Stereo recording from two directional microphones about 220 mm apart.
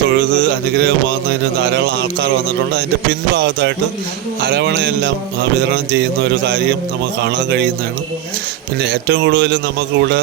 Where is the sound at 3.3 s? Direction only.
50° right (ahead or behind).